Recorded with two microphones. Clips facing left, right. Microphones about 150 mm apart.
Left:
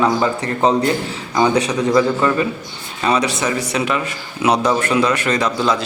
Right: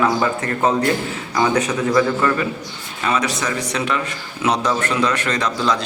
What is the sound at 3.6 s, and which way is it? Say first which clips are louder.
A man's voice: left 2 dB; 10° left (ahead or behind).